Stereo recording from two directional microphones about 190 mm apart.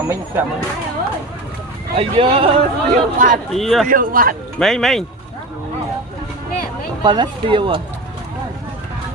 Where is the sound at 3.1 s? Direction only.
45° right (ahead or behind).